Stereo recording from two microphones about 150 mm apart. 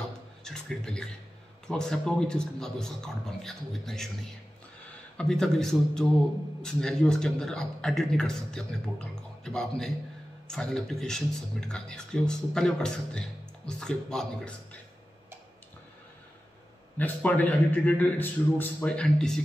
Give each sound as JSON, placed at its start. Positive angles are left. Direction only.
{"t": 0.4, "sound": "a man's voice", "side_deg": 5}
{"t": 5.1, "sound": "a man's voice", "side_deg": 5}
{"t": 17.0, "sound": "a man's voice", "side_deg": 10}